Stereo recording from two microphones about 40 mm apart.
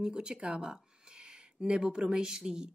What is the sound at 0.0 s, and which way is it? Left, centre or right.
Speech, right.